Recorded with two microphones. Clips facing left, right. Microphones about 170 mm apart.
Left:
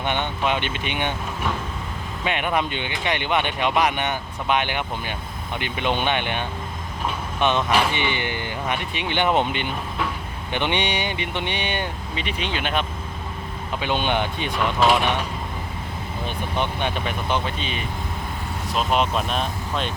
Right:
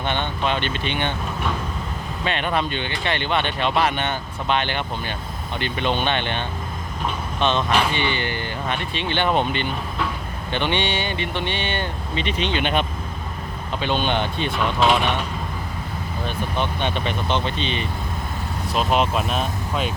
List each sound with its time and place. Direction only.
0.0 s speech: 15° left (ahead or behind)
2.2 s speech: 10° left (ahead or behind)
13.8 s speech: 15° left (ahead or behind)
16.2 s speech: 15° left (ahead or behind); by 19.9 s 5° right (ahead or behind)